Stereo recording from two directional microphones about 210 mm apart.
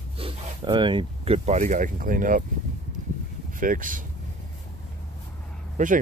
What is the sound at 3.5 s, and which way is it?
Speech, 40° right (ahead or behind).